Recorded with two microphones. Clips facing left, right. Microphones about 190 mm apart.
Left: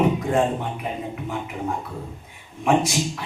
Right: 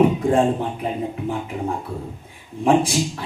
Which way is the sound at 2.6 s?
30° right (ahead or behind).